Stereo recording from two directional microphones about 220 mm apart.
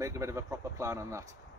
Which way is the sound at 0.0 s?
15° right (ahead or behind).